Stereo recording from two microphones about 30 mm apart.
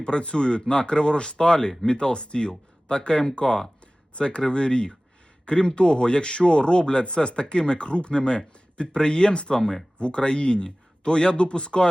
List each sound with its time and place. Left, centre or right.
0.0 s speech: left
9.6 s speech: centre
10.0 s speech: left